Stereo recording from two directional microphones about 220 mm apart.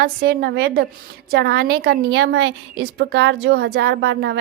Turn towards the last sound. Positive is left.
turn(degrees=-50)  # may be behind; listen again after turning